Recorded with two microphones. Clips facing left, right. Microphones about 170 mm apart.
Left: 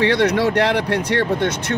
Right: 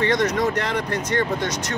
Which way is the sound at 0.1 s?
70° left (ahead or behind).